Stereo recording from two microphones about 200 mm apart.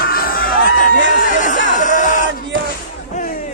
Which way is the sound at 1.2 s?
40° left (ahead or behind).